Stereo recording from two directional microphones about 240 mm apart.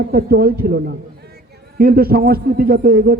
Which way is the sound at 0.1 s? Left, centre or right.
Right.